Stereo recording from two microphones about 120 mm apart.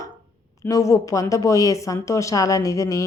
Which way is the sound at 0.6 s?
25° left (ahead or behind).